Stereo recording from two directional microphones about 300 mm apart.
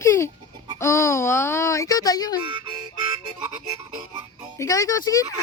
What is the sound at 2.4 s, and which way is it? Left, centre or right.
Music, centre.